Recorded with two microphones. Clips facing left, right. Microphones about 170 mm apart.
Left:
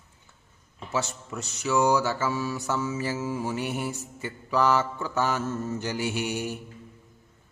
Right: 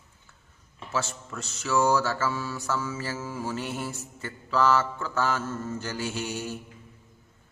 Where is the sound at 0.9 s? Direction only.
20° left (ahead or behind).